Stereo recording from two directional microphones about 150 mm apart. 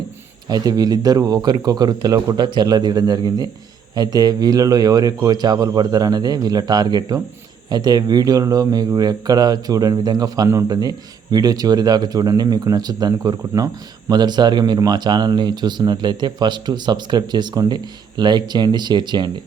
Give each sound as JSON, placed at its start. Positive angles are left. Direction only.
{"t": 0.4, "sound": "speech", "side_deg": -25}